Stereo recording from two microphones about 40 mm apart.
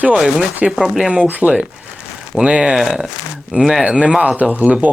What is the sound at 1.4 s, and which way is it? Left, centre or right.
Speech, right.